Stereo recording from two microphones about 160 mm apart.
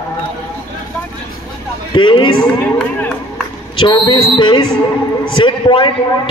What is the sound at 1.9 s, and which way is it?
Speech, 30° left (ahead or behind).